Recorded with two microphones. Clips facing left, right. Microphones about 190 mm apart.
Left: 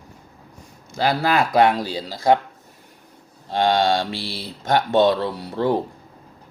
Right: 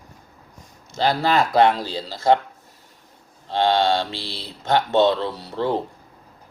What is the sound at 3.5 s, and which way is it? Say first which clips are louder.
Speech: even; 15° left (ahead or behind).